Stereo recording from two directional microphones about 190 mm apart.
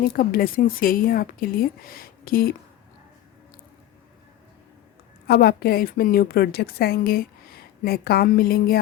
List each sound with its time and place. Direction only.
0.2 s a woman's voice: 50° left (ahead or behind)
5.3 s a woman's voice: 55° left (ahead or behind)